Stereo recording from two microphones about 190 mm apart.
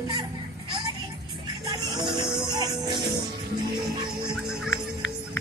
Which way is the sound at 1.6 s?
20° right (ahead or behind).